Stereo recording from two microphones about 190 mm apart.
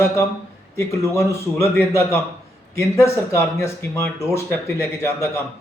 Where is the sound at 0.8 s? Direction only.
15° left (ahead or behind).